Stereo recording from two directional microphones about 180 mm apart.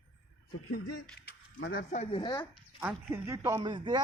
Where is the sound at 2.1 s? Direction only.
25° left (ahead or behind).